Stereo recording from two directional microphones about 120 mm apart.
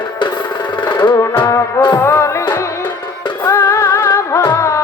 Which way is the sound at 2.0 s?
20° left (ahead or behind).